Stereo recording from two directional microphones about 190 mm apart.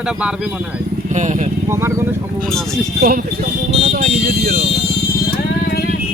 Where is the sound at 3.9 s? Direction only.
45° right (ahead or behind).